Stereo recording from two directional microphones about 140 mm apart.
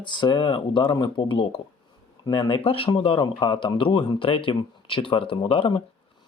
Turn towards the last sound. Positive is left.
turn(degrees=40)  # may be behind; listen again after turning